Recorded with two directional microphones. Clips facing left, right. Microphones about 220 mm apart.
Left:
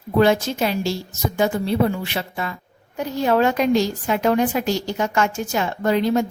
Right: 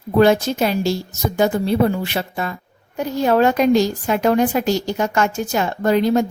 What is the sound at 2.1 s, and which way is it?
A woman's voice, 40° right (ahead or behind).